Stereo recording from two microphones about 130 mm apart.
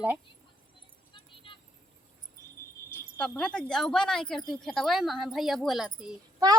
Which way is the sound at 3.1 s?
10° left (ahead or behind).